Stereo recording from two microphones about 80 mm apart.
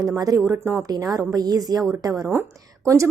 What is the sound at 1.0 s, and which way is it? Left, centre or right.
Speech, right.